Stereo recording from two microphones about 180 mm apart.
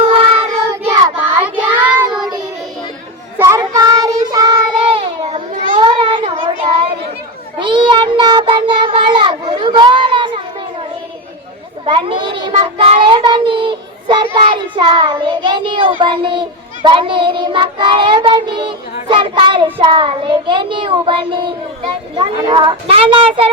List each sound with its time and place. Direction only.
0.0 s child singing: 30° right (ahead or behind)
0.7 s child singing: 15° right (ahead or behind)
3.3 s child singing: 15° right (ahead or behind); by 5.8 s 40° right (ahead or behind)
5.8 s child singing: 25° right (ahead or behind)
6.7 s a sound: 30° right (ahead or behind)
7.6 s child singing: 25° right (ahead or behind)
11.9 s child singing: 30° right (ahead or behind)
22.1 s a sound: 25° right (ahead or behind)